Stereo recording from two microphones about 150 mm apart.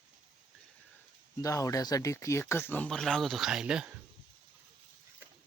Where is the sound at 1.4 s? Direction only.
20° left (ahead or behind); by 3.9 s 5° right (ahead or behind).